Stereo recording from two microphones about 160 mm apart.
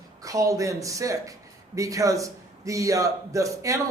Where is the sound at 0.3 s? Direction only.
20° right (ahead or behind).